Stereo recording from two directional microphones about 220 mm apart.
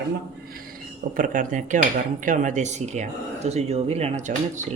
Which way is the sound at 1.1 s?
35° right (ahead or behind).